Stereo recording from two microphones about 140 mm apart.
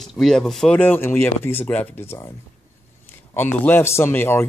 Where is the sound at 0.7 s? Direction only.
15° left (ahead or behind).